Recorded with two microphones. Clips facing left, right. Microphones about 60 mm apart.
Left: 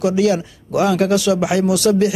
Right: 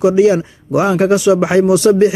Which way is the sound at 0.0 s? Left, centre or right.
Right.